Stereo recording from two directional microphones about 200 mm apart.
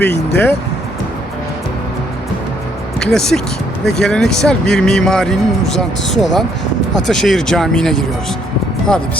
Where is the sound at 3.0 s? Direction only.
5° left (ahead or behind).